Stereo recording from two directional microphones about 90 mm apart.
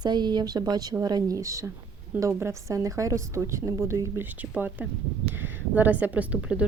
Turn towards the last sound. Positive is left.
turn(degrees=-15)  # may be behind; listen again after turning